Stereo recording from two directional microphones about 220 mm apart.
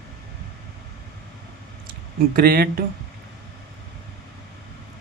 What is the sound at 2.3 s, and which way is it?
Speech, 40° right (ahead or behind).